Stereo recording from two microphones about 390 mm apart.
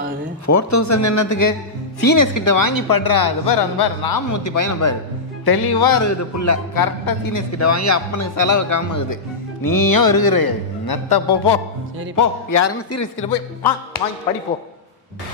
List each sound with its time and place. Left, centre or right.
0.5 s speech: left
5.4 s speech: left
7.5 s speech: left
12.2 s speech: left